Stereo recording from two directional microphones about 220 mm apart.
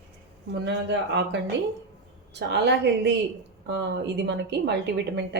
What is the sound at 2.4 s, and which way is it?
A woman's voice, 50° right (ahead or behind).